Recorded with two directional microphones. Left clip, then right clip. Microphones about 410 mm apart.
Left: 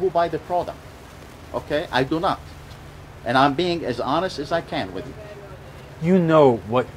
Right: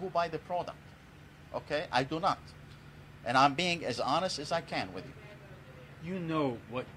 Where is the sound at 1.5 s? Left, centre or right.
Centre.